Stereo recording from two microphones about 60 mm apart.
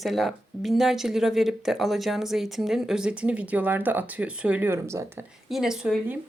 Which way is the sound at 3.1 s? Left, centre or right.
Right.